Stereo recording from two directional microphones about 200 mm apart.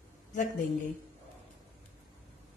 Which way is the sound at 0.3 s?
40° left (ahead or behind).